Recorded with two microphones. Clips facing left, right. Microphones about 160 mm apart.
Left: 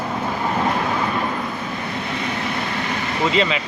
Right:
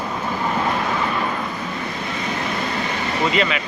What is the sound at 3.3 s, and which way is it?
Speech, 25° left (ahead or behind).